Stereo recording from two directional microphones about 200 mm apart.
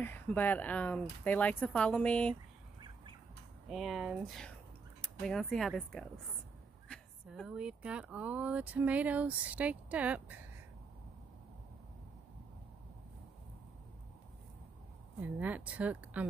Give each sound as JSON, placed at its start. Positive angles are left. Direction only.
{"t": 0.0, "sound": "speech", "side_deg": 10}
{"t": 3.6, "sound": "speech", "side_deg": 0}
{"t": 15.1, "sound": "speech", "side_deg": -5}